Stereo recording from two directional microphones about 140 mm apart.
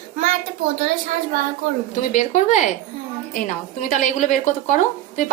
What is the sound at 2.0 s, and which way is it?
Speech, 60° left (ahead or behind).